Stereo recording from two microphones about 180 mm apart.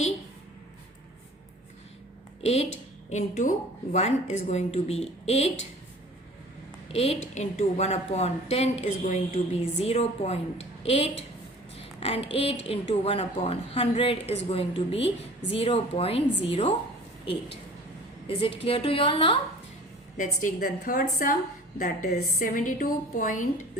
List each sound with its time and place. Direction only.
2.4 s a woman's voice: 35° left (ahead or behind)
6.9 s a woman's voice: 35° left (ahead or behind)
18.3 s a woman's voice: 30° left (ahead or behind)
20.1 s a woman's voice: 45° left (ahead or behind)